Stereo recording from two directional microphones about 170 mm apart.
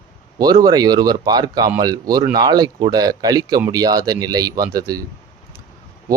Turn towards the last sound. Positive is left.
turn(degrees=-20)  # may be behind; listen again after turning